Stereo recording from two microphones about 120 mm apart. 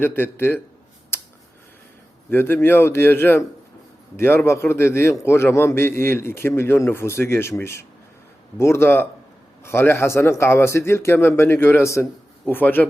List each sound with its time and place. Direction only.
0.0 s speech: 15° left (ahead or behind)
1.1 s a sound: 20° left (ahead or behind)
2.3 s a man's voice: 15° left (ahead or behind)